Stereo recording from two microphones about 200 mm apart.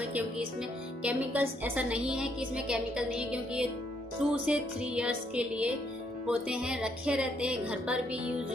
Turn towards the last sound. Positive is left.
turn(degrees=-5)  # may be behind; listen again after turning